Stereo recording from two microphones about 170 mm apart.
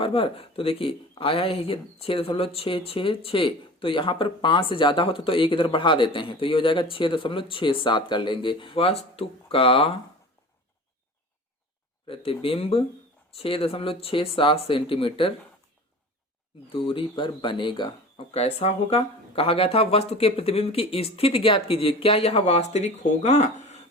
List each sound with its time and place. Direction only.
0.0 s speech: 35° left (ahead or behind)
12.0 s speech: 30° left (ahead or behind)
16.6 s speech: 30° left (ahead or behind)
18.3 s speech: 40° left (ahead or behind)